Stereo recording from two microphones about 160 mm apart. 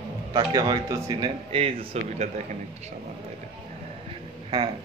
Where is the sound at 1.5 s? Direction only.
35° right (ahead or behind).